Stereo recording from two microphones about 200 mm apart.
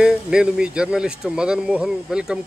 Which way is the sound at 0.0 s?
5° right (ahead or behind).